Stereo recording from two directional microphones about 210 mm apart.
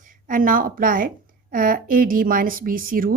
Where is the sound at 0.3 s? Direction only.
40° right (ahead or behind).